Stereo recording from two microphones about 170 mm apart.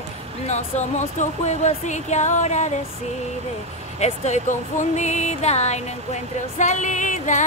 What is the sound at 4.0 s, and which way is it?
Speech, 40° left (ahead or behind).